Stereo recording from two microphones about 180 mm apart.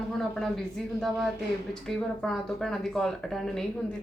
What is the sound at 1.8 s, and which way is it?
Speech, centre (ahead or behind).